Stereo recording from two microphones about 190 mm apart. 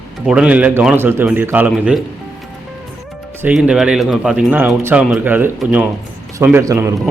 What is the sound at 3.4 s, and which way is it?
A man's voice, 5° right (ahead or behind).